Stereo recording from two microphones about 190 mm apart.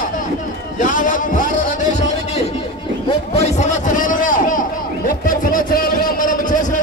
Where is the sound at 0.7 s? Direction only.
45° left (ahead or behind).